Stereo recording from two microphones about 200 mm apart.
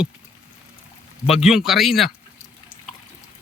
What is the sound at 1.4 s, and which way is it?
Speech, centre (ahead or behind).